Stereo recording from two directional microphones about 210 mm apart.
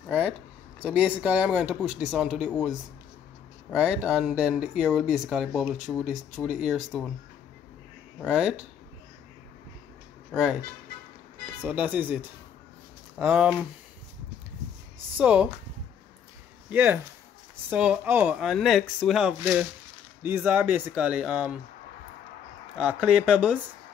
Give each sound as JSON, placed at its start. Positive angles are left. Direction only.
{"t": 0.8, "sound": "speech", "side_deg": -5}
{"t": 3.7, "sound": "speech", "side_deg": -5}
{"t": 8.3, "sound": "speech", "side_deg": -5}
{"t": 10.3, "sound": "speech", "side_deg": -5}
{"t": 11.6, "sound": "speech", "side_deg": -10}
{"t": 13.2, "sound": "speech", "side_deg": -5}
{"t": 15.1, "sound": "speech", "side_deg": -5}
{"t": 16.6, "sound": "speech", "side_deg": -10}
{"t": 22.8, "sound": "speech", "side_deg": -5}